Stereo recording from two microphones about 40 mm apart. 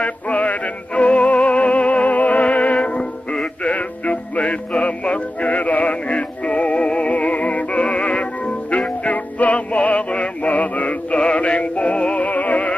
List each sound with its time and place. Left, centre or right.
0.0 s music: left